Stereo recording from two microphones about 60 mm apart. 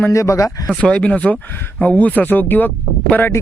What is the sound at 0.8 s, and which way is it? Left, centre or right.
Speech, left.